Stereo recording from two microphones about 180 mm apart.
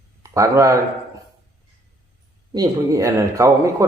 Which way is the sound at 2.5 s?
20° right (ahead or behind).